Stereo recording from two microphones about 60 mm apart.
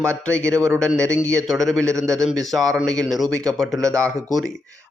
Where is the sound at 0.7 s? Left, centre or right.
Centre.